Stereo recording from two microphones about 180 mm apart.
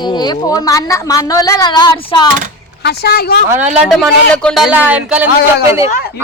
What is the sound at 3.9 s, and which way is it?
Speech, 5° left (ahead or behind).